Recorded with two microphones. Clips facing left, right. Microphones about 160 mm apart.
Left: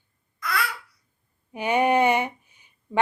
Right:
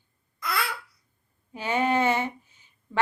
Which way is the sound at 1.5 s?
20° left (ahead or behind).